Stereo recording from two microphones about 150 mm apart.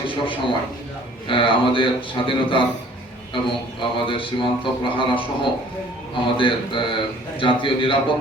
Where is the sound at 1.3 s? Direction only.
35° left (ahead or behind).